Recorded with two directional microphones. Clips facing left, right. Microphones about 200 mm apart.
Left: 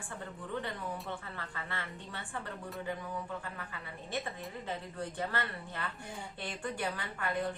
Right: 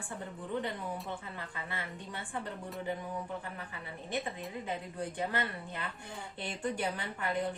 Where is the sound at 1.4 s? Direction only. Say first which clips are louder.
Right 1 dB; 15° right (ahead or behind).